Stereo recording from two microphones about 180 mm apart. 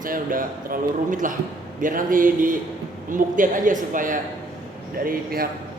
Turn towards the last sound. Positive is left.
turn(degrees=-55)  # may be behind; listen again after turning